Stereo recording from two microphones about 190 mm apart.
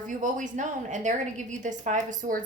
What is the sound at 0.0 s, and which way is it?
A woman's voice, 45° right (ahead or behind).